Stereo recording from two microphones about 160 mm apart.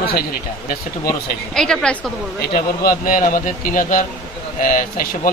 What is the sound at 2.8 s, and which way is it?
Speech, 60° left (ahead or behind).